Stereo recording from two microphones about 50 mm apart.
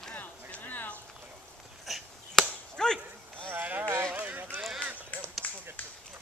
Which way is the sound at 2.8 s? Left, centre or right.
Centre.